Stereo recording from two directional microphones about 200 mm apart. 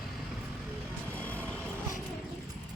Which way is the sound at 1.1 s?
10° left (ahead or behind).